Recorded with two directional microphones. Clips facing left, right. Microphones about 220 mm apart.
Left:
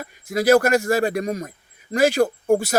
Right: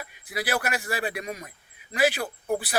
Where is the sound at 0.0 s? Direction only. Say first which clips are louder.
Left 11 dB; 45° left (ahead or behind).